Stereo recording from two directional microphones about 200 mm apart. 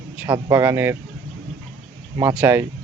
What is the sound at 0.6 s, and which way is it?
Speech, 10° right (ahead or behind).